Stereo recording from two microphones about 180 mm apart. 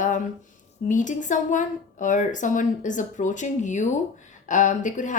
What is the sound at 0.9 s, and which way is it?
Speech, 45° left (ahead or behind).